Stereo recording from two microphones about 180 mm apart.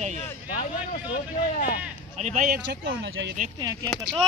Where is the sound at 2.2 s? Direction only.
45° right (ahead or behind).